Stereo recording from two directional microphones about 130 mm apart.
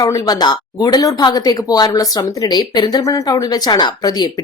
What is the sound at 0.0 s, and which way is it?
Speech, 30° left (ahead or behind).